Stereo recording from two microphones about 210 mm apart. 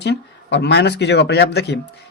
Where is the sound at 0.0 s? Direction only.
55° left (ahead or behind).